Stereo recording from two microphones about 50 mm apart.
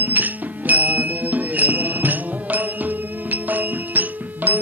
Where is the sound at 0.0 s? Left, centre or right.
Right.